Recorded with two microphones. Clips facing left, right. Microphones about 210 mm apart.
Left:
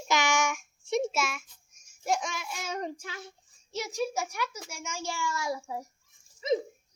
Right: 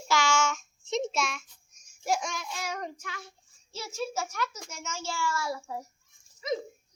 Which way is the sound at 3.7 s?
15° left (ahead or behind).